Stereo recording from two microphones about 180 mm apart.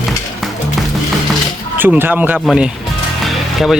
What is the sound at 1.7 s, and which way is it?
Speech, 10° right (ahead or behind).